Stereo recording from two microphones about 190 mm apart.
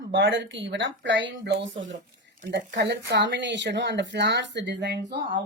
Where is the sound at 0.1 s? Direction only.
70° right (ahead or behind).